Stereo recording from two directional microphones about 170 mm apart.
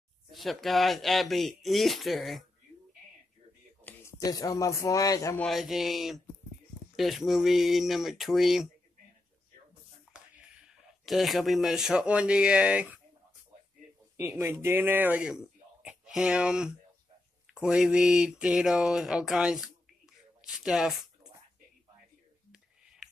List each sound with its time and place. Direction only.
0.3 s speech: centre (ahead or behind)
3.8 s speech: 20° left (ahead or behind)
5.4 s speech: centre (ahead or behind)
10.1 s speech: 5° right (ahead or behind)
14.1 s speech: 15° right (ahead or behind)
22.5 s whispering: 5° right (ahead or behind)